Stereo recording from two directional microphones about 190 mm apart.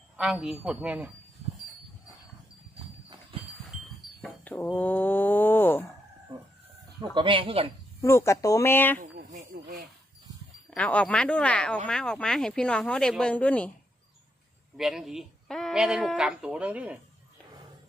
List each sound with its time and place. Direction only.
0.2 s speech: centre (ahead or behind)
3.3 s livestock: 25° right (ahead or behind)
4.2 s a sound: 5° left (ahead or behind)
7.0 s speech: 25° right (ahead or behind)
8.0 s speech: 15° left (ahead or behind)
9.0 s a sound: 50° right (ahead or behind)
10.7 s speech: 5° left (ahead or behind)
14.8 s speech: centre (ahead or behind)